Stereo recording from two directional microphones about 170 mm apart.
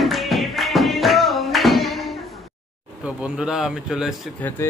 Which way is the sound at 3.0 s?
5° right (ahead or behind).